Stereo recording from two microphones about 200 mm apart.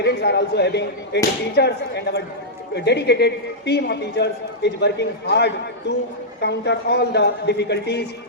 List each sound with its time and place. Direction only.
0.0 s a man's voice: 55° left (ahead or behind)
2.7 s a man's voice: 55° left (ahead or behind)